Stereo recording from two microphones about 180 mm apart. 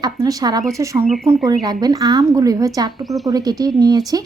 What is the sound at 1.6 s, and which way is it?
A woman's voice, 20° right (ahead or behind).